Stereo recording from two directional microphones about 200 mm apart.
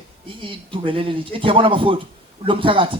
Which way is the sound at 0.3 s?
25° right (ahead or behind).